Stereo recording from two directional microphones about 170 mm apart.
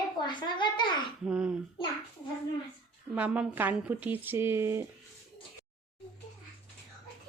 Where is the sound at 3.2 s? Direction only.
10° right (ahead or behind).